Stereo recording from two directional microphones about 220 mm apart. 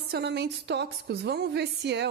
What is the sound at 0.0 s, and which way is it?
A woman's voice, 50° right (ahead or behind).